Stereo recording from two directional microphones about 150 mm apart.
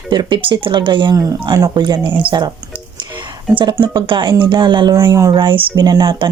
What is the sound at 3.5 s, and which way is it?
A woman's voice, 30° right (ahead or behind).